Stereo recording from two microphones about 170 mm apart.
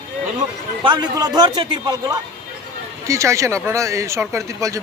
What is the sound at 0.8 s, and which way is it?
Speech, 25° right (ahead or behind).